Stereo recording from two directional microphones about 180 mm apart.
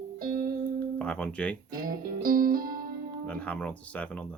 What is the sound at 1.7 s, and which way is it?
Music, 50° right (ahead or behind).